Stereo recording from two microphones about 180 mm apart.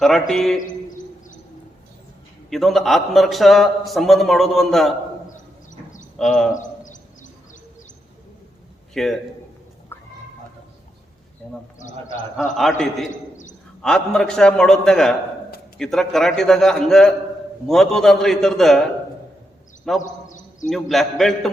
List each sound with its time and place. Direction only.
0.0 s a man's voice: centre (ahead or behind)
2.5 s a man's voice: centre (ahead or behind)
6.1 s a man's voice: 5° left (ahead or behind)
6.6 s a sound: 45° left (ahead or behind)
8.9 s a man's voice: centre (ahead or behind)
9.9 s fowl: 10° left (ahead or behind)
11.4 s a man's voice: 5° left (ahead or behind)
13.1 s a sound: 45° left (ahead or behind)
13.8 s a man's voice: 5° left (ahead or behind)
20.0 s a sound: 45° left (ahead or behind)
20.7 s a man's voice: centre (ahead or behind)